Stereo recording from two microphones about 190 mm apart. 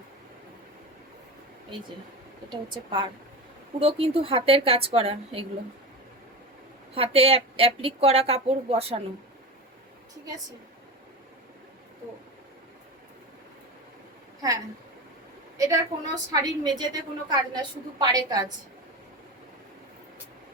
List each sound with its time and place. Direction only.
2.5 s a woman's voice: 25° right (ahead or behind)
6.9 s a woman's voice: 30° right (ahead or behind)
15.5 s a woman's voice: 20° right (ahead or behind)